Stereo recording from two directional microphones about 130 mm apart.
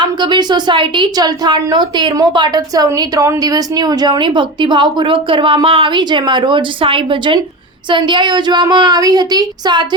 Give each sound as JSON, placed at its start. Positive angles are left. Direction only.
{"t": 0.0, "sound": "a woman's voice", "side_deg": -35}